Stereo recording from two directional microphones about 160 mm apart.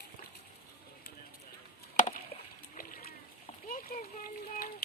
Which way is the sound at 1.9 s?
50° left (ahead or behind).